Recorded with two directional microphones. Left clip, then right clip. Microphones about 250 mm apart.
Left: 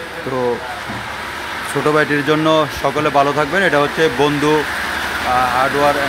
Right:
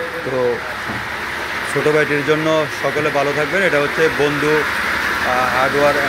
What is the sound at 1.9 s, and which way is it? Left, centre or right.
Speech, centre.